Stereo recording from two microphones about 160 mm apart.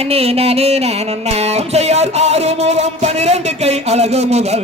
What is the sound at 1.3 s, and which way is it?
Music, 40° right (ahead or behind).